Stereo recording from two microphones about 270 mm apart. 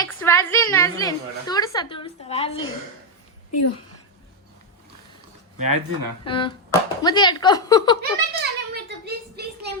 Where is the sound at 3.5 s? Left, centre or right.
Left.